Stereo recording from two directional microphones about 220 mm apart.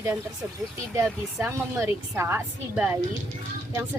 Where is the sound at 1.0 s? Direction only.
5° right (ahead or behind).